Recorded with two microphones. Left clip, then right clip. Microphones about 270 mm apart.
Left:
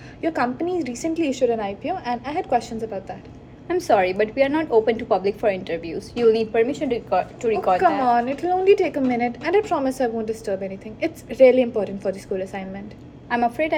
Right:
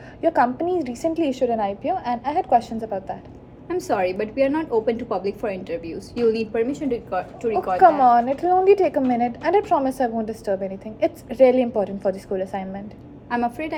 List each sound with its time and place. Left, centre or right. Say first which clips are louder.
0.2 s a woman's voice: right 4 dB; centre
3.7 s a woman's voice: left 4 dB; centre
7.8 s a woman's voice: right 4 dB; centre
13.3 s a woman's voice: left 3 dB; centre